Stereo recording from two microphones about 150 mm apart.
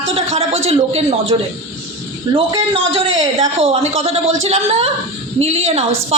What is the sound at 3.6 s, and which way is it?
A man's voice, 40° right (ahead or behind).